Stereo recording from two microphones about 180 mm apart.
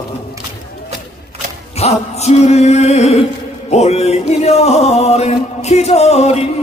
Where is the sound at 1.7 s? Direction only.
35° left (ahead or behind).